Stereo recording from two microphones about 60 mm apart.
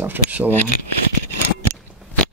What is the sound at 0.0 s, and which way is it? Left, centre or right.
Speech, right.